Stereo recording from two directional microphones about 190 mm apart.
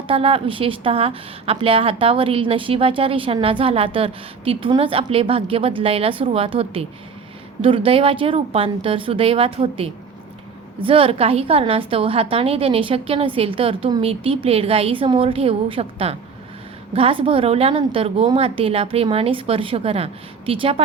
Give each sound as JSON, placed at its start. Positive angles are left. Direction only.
{"t": 0.1, "sound": "a woman's voice", "side_deg": -30}